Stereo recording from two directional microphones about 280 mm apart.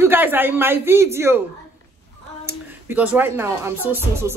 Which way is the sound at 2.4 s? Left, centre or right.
Centre.